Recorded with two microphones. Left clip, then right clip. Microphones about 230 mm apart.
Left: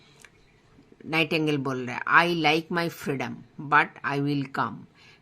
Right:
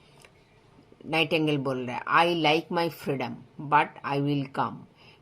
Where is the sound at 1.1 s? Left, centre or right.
Left.